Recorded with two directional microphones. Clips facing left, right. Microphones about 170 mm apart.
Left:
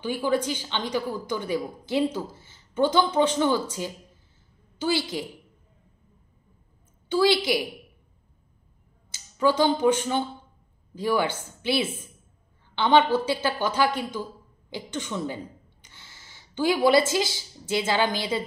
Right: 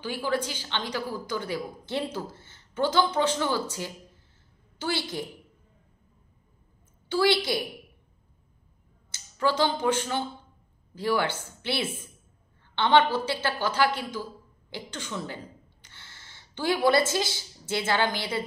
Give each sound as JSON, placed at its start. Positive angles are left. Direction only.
{"t": 0.0, "sound": "a woman's voice", "side_deg": 15}
{"t": 7.1, "sound": "a woman's voice", "side_deg": 15}
{"t": 9.1, "sound": "a woman's voice", "side_deg": 15}
{"t": 14.7, "sound": "a sound", "side_deg": 20}
{"t": 17.1, "sound": "a woman's voice", "side_deg": 15}